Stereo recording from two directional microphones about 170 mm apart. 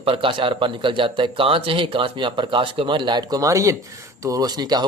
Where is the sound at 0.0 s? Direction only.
35° right (ahead or behind).